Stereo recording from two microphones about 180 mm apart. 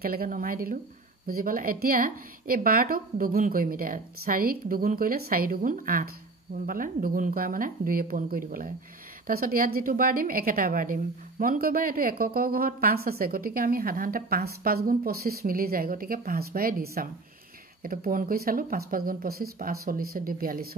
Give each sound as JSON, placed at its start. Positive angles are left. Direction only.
{"t": 0.0, "sound": "a woman's voice", "side_deg": -55}